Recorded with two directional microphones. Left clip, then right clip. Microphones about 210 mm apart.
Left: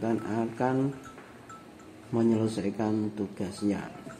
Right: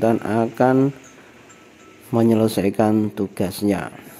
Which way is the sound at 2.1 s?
55° right (ahead or behind).